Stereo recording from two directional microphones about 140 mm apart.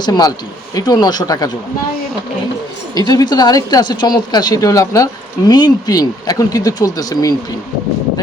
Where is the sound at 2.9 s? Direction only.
25° left (ahead or behind).